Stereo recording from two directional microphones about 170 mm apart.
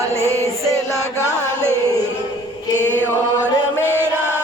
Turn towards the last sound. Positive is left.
turn(degrees=10)  # may be behind; listen again after turning